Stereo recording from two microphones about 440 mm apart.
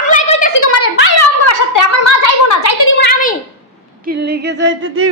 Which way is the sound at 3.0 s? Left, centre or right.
Centre.